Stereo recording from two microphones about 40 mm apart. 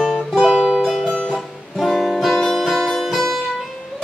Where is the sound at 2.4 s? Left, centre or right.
Centre.